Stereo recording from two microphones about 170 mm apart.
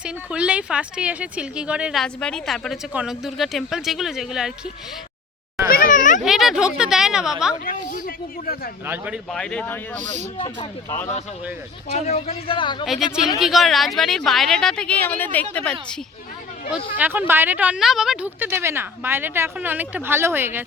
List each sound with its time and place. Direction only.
0.0 s speech: 5° right (ahead or behind)
5.6 s children playing: 55° left (ahead or behind)
6.2 s speech: centre (ahead or behind)
7.6 s a woman's voice: 55° left (ahead or behind)
8.9 s a woman's voice: 10° right (ahead or behind)
9.3 s speech: 5° left (ahead or behind)
10.3 s a man's voice: 30° left (ahead or behind)
10.8 s speech: 15° left (ahead or behind)
11.9 s a man's voice: 40° left (ahead or behind)
13.4 s speech: centre (ahead or behind)
17.0 s a woman's voice: 10° right (ahead or behind)